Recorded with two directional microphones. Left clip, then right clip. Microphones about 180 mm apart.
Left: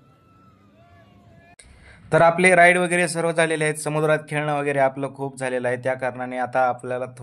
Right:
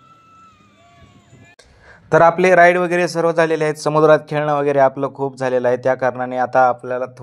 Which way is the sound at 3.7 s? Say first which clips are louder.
Right 9 dB; 20° right (ahead or behind).